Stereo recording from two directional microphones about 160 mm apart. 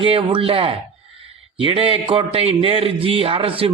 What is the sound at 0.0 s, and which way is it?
A man's voice, 35° right (ahead or behind).